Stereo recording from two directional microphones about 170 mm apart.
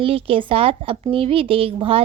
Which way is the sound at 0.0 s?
35° right (ahead or behind).